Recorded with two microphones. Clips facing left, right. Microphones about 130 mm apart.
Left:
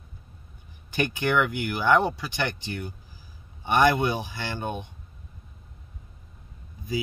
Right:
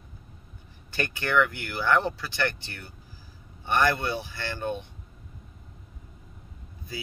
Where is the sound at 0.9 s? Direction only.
15° left (ahead or behind).